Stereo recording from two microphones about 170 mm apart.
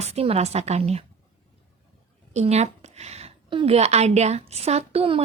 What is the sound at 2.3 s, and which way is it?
A woman's voice, 40° right (ahead or behind).